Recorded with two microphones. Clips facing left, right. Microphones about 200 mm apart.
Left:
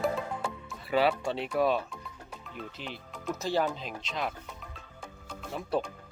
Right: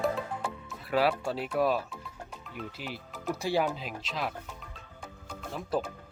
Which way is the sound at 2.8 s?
5° right (ahead or behind).